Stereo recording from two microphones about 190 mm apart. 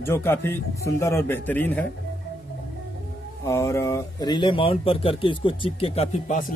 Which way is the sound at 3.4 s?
15° left (ahead or behind).